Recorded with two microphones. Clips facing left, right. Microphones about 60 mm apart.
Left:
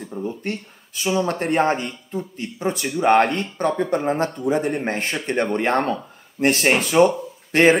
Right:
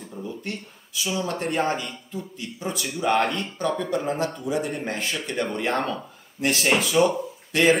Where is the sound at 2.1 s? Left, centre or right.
Left.